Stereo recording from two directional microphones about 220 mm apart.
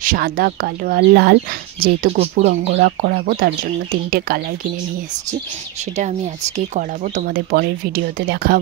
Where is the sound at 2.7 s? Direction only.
45° right (ahead or behind).